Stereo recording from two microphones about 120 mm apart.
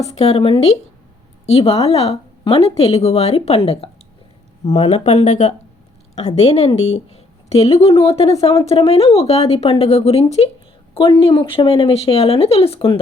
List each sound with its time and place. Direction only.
0.0 s a woman's voice: 60° left (ahead or behind); by 5.5 s 90° left
6.1 s a woman's voice: 65° left (ahead or behind)
10.9 s speech: 50° left (ahead or behind)